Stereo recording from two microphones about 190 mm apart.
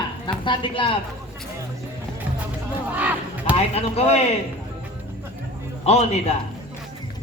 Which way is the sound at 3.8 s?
35° left (ahead or behind).